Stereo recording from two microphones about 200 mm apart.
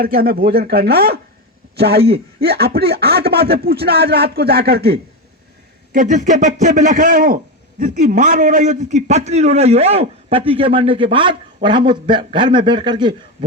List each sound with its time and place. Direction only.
0.0 s speech: 50° right (ahead or behind)
5.9 s a man's voice: 40° right (ahead or behind); by 13.1 s 20° right (ahead or behind)